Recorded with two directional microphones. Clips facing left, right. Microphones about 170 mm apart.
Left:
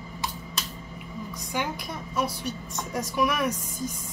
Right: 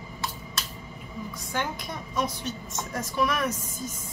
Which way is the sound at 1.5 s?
10° left (ahead or behind).